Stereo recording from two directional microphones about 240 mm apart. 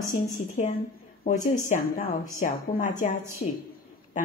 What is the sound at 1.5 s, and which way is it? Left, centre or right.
A woman's voice, left.